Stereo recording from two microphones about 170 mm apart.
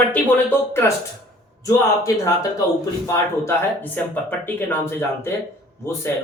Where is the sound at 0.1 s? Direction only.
15° left (ahead or behind).